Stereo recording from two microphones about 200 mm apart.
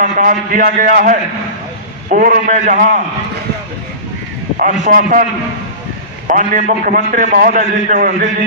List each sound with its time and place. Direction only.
0.0 s a man's voice: 40° right (ahead or behind)
4.8 s a man's voice: 45° right (ahead or behind)
6.2 s a man's voice: 40° right (ahead or behind)